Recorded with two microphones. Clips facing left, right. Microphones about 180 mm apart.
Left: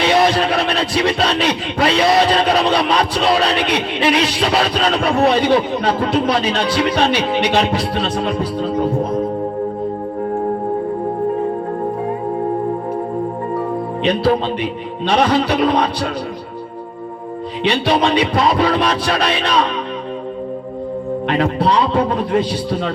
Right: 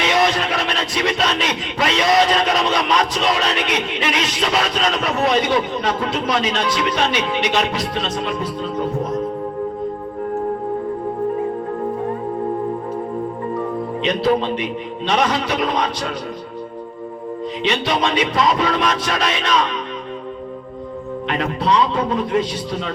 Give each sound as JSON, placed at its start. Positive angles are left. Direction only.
{"t": 0.0, "sound": "music", "side_deg": 30}
{"t": 13.5, "sound": "speech", "side_deg": 30}
{"t": 17.7, "sound": "music", "side_deg": 30}
{"t": 21.2, "sound": "speech", "side_deg": 30}
{"t": 22.1, "sound": "music", "side_deg": 30}